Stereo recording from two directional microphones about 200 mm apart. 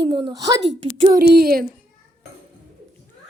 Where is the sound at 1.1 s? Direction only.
50° right (ahead or behind).